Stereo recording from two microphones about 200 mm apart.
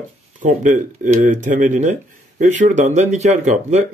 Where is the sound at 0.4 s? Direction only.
40° right (ahead or behind).